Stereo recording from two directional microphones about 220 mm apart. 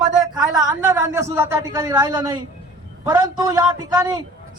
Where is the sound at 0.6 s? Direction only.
15° right (ahead or behind).